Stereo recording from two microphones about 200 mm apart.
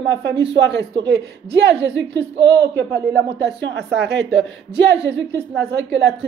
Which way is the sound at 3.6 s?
55° right (ahead or behind).